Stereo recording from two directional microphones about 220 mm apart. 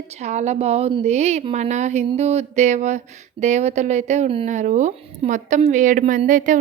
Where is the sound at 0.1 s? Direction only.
30° right (ahead or behind).